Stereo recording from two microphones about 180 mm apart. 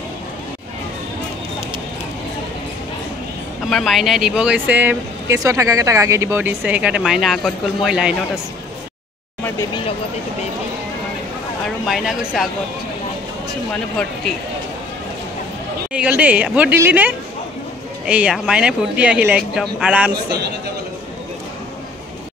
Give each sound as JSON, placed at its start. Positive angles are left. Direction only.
{"t": 3.6, "sound": "speech", "side_deg": 0}
{"t": 11.9, "sound": "speech", "side_deg": 0}
{"t": 15.9, "sound": "speech", "side_deg": -5}